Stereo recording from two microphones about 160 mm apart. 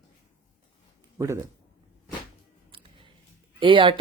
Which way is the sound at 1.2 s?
15° right (ahead or behind).